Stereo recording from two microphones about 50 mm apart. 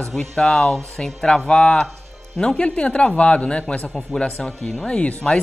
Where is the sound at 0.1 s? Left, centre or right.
Centre.